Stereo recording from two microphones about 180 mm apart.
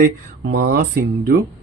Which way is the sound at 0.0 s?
60° right (ahead or behind).